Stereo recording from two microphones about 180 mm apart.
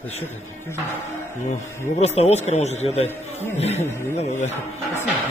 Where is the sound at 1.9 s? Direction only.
35° left (ahead or behind).